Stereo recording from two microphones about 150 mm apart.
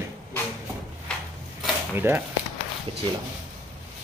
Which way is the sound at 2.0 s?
15° right (ahead or behind).